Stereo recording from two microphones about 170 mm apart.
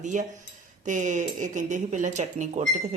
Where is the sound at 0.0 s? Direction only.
45° right (ahead or behind).